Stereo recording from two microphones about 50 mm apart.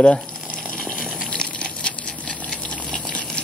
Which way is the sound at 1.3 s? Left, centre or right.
Centre.